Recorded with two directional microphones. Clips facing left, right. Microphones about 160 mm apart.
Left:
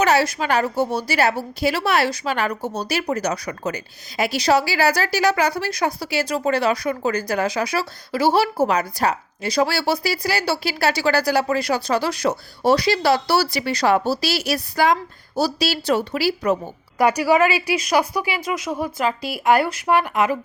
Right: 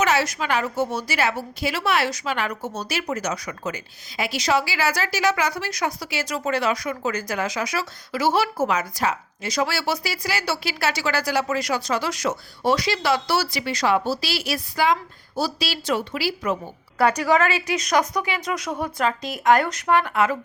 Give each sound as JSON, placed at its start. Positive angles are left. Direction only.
{"t": 0.0, "sound": "a woman's voice", "side_deg": 35}
{"t": 17.0, "sound": "a woman's voice", "side_deg": 10}